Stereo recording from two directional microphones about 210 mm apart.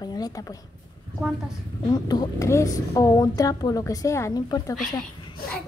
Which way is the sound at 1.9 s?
20° left (ahead or behind).